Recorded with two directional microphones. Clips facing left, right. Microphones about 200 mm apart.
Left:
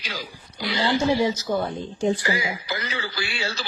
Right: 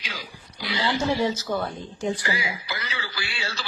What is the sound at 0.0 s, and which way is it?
Speech, 40° left (ahead or behind).